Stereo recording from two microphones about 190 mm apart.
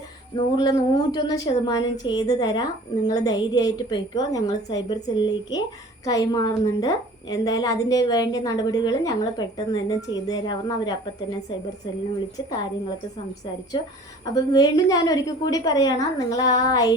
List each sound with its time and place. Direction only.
0.3 s a woman's voice: 20° left (ahead or behind)
14.3 s a woman's voice: 20° left (ahead or behind)